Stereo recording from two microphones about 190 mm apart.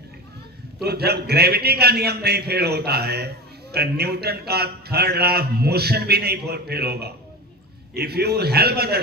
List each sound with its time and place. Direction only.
0.8 s a man's voice: 55° right (ahead or behind)